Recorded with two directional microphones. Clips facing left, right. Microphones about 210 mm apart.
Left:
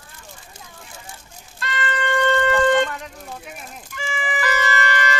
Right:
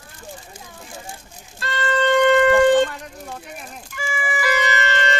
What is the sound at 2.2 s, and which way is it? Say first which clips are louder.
Shofar: right 4 dB; 15° right (ahead or behind).